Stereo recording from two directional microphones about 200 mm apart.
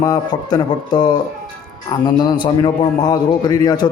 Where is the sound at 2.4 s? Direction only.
20° left (ahead or behind).